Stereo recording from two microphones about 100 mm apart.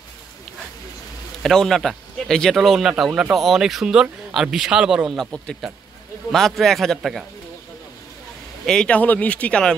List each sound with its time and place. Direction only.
1.4 s speech: 5° left (ahead or behind)
8.6 s speech: 10° left (ahead or behind)